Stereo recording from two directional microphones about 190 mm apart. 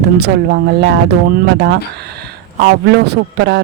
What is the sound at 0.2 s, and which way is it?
Speech, 60° right (ahead or behind).